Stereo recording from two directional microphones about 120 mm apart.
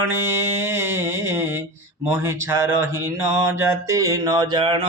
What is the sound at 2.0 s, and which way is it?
Mantra, 20° right (ahead or behind).